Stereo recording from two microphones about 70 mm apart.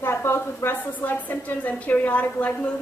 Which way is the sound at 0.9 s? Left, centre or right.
Left.